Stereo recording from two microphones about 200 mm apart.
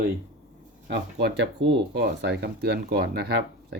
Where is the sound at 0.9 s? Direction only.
55° right (ahead or behind).